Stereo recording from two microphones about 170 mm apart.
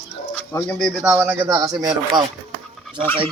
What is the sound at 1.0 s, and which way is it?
Speech, 10° right (ahead or behind).